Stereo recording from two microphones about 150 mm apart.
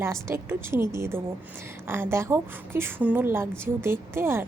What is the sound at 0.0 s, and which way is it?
A woman's voice, 15° right (ahead or behind).